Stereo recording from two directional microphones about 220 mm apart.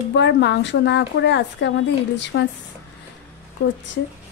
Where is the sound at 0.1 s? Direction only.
50° left (ahead or behind).